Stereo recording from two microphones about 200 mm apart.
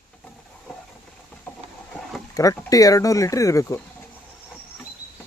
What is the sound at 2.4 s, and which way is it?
Speech, 15° left (ahead or behind).